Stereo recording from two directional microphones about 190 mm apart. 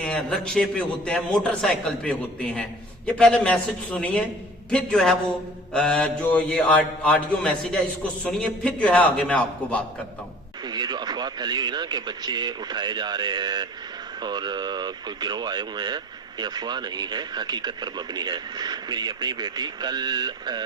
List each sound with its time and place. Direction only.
0.0 s a man's voice: 5° left (ahead or behind)
10.6 s speech: 20° right (ahead or behind)